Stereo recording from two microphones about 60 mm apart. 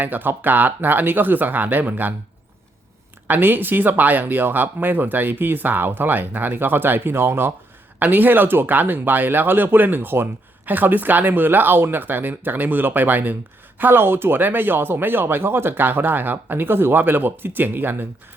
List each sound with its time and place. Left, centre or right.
0.0 s speech: right
3.2 s speech: right